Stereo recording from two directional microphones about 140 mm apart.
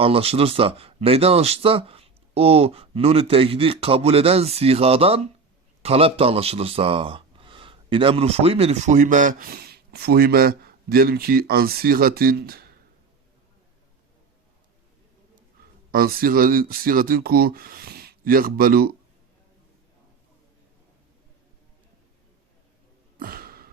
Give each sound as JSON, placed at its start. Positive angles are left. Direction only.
{"t": 0.0, "sound": "speech", "side_deg": -45}
{"t": 15.9, "sound": "speech", "side_deg": -90}
{"t": 23.1, "sound": "a sound", "side_deg": -90}